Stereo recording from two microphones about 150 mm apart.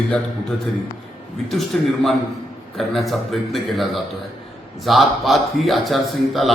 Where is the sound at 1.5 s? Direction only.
Centre (ahead or behind).